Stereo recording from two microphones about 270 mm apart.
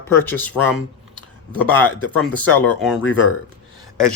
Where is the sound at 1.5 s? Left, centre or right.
Centre.